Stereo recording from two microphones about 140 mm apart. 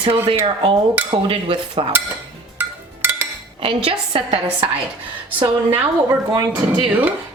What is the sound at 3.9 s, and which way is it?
Speech, 40° right (ahead or behind).